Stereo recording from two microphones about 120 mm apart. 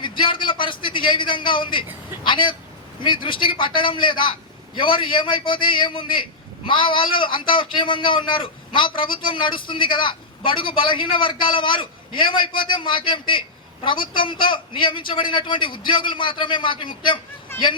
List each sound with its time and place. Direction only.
0.0 s a man's voice: 45° left (ahead or behind)